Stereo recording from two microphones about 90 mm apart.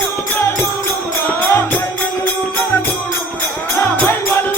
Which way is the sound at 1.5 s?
25° left (ahead or behind).